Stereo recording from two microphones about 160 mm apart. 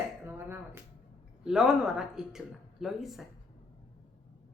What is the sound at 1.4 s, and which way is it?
A woman's voice, 5° right (ahead or behind).